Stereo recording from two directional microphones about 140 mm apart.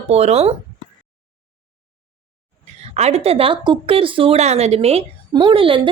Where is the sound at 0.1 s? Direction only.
50° right (ahead or behind).